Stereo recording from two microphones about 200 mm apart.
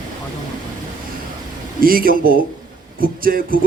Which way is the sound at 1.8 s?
45° right (ahead or behind).